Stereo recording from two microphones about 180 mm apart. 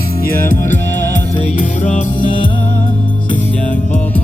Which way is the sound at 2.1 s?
30° left (ahead or behind).